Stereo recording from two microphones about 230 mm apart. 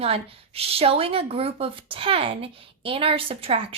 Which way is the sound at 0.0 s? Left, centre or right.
Right.